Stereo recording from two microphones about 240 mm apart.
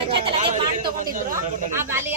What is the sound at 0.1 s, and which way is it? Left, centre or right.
Chatter, right.